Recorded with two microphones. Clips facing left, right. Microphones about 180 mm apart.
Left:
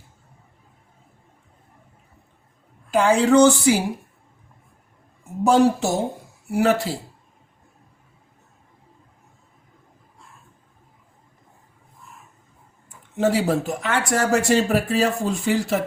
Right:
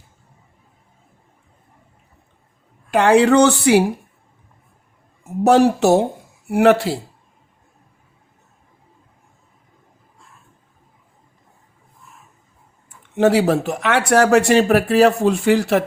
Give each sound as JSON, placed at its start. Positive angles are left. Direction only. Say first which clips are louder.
{"t": 2.9, "sound": "speech", "louder": "right 3 dB", "side_deg": -70}
{"t": 5.4, "sound": "speech", "louder": "right 4 dB", "side_deg": -70}
{"t": 13.1, "sound": "speech", "louder": "right 5 dB", "side_deg": -70}